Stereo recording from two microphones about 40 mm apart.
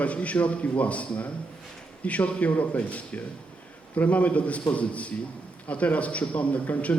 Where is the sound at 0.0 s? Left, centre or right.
Left.